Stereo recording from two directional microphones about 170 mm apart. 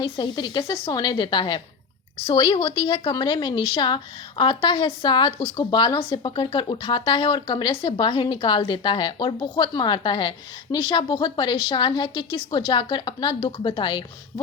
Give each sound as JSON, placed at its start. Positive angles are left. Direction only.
{"t": 0.0, "sound": "speech", "side_deg": 25}